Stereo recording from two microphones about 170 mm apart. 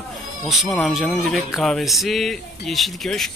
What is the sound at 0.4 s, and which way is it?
Speech, centre (ahead or behind).